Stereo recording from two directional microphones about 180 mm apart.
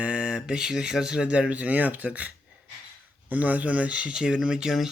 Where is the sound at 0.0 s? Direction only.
5° right (ahead or behind).